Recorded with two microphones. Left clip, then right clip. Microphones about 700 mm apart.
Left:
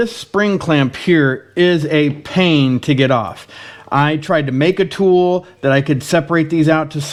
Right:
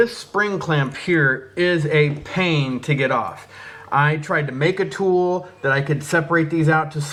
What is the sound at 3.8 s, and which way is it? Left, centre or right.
Speech, left.